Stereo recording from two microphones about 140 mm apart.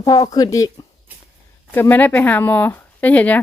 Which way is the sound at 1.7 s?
15° left (ahead or behind).